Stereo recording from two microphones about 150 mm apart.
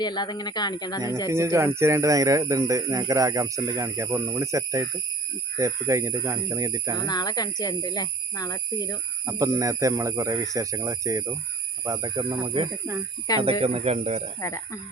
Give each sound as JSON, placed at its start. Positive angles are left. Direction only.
{"t": 0.0, "sound": "speech", "side_deg": 30}
{"t": 1.3, "sound": "speech", "side_deg": -20}
{"t": 7.1, "sound": "speech", "side_deg": 25}
{"t": 9.2, "sound": "speech", "side_deg": -20}
{"t": 13.4, "sound": "speech", "side_deg": -40}
{"t": 14.4, "sound": "speech", "side_deg": 20}